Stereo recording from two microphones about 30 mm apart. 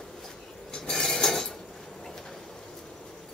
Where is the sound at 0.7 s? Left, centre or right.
Left.